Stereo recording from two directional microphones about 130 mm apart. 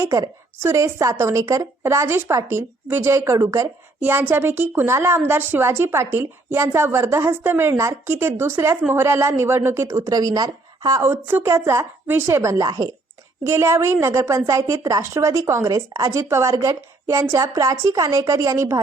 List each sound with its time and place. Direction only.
0.0 s a woman's voice: 25° right (ahead or behind)
4.0 s a woman's voice: 15° right (ahead or behind)